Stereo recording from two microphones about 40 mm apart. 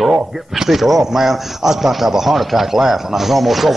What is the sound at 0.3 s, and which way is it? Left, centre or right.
A man's voice, centre.